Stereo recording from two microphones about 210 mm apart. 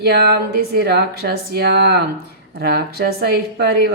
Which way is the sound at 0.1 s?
50° right (ahead or behind).